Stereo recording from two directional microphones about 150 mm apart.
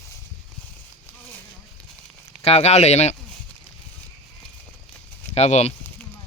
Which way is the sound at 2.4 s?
45° left (ahead or behind).